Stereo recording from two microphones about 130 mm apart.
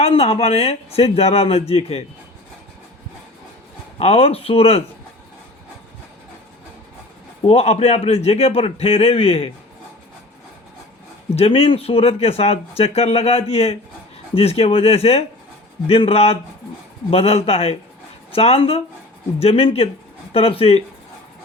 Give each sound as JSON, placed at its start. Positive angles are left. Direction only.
{"t": 0.0, "sound": "speech", "side_deg": 50}
{"t": 4.0, "sound": "speech", "side_deg": 50}
{"t": 7.4, "sound": "speech", "side_deg": 50}
{"t": 11.3, "sound": "speech", "side_deg": 50}